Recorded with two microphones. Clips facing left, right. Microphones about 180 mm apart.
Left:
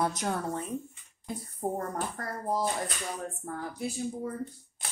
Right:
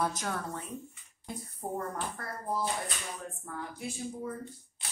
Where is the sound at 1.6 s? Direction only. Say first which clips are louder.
Left 3 dB; 40° left (ahead or behind).